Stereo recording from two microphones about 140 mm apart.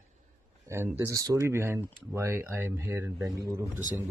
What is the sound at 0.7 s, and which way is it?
Speech, 20° right (ahead or behind).